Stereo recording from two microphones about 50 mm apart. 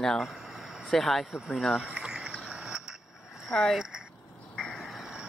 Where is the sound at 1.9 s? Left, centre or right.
Centre.